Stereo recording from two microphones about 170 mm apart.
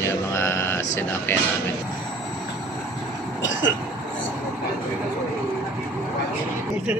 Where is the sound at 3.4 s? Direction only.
90° left.